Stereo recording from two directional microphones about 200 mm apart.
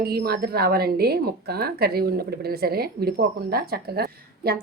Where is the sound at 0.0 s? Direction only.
50° right (ahead or behind).